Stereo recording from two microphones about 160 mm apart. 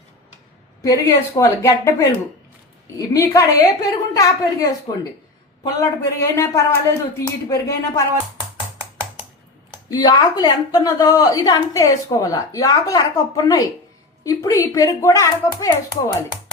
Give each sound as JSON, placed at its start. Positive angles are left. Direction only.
{"t": 0.8, "sound": "a woman's voice", "side_deg": 20}
{"t": 9.9, "sound": "a woman's voice", "side_deg": 25}